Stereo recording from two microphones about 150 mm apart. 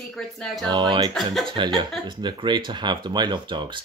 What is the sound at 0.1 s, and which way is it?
Speech, centre (ahead or behind).